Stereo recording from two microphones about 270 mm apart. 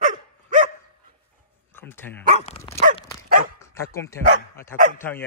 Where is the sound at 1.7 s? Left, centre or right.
Centre.